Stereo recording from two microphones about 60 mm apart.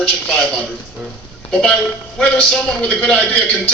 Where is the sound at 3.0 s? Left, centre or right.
Left.